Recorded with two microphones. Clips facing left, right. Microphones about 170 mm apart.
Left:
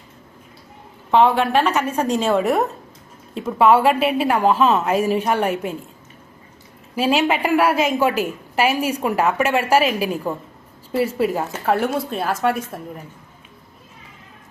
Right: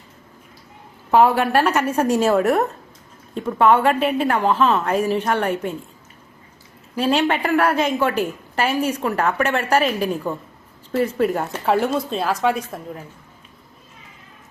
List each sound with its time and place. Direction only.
1.1 s a woman's voice: 5° right (ahead or behind); by 5.7 s 10° left (ahead or behind)
6.9 s a woman's voice: 5° left (ahead or behind)